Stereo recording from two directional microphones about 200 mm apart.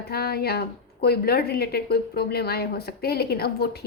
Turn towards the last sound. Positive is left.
turn(degrees=50)  # may be behind; listen again after turning